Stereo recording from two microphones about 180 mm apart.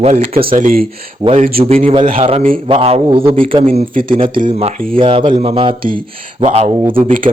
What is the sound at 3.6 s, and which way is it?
Speech, 45° right (ahead or behind).